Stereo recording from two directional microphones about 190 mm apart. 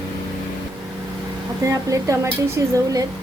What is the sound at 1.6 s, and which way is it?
Speech, 15° right (ahead or behind).